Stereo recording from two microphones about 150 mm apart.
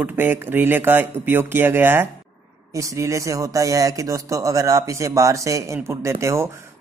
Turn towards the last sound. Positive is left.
turn(degrees=-20)  # may be behind; listen again after turning